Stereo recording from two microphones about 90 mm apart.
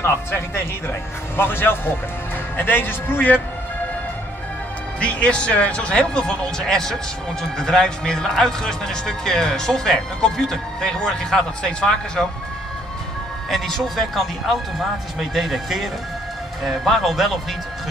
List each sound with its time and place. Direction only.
0.0 s speech: 30° left (ahead or behind)
5.0 s a man's voice: 15° left (ahead or behind)
13.5 s a man's voice: centre (ahead or behind)